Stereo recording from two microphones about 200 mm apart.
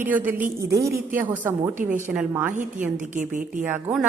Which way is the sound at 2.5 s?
40° right (ahead or behind).